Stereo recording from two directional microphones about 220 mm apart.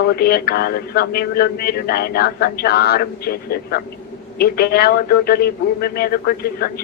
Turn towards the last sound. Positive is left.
turn(degrees=45)  # may be behind; listen again after turning